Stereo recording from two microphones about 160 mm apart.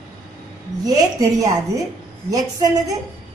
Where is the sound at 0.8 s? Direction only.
20° right (ahead or behind).